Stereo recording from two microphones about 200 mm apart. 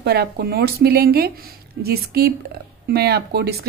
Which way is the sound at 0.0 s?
50° right (ahead or behind).